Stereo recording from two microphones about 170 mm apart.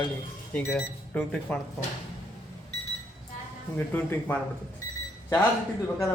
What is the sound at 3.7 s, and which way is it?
Speech, 10° left (ahead or behind).